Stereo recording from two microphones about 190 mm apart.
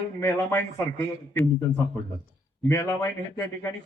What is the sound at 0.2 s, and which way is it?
A man's voice, 10° left (ahead or behind).